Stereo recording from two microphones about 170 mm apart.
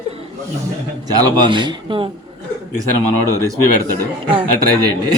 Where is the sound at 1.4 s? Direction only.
25° right (ahead or behind).